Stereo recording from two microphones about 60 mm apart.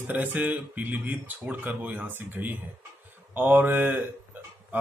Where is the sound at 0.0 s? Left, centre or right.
Right.